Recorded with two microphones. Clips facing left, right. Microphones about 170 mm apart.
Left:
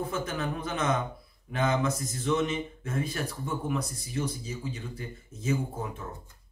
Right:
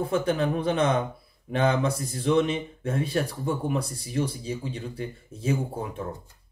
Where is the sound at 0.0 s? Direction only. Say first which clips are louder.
Right 7 dB; 30° right (ahead or behind).